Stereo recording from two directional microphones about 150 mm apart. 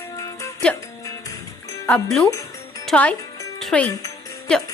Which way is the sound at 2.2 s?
20° left (ahead or behind).